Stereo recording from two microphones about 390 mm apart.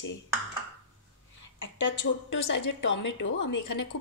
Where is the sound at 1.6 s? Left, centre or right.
Left.